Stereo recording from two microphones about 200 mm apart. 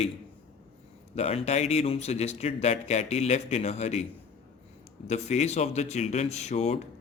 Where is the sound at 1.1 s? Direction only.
30° left (ahead or behind).